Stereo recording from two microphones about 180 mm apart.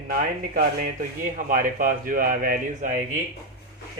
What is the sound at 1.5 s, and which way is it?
A man's voice, 50° right (ahead or behind).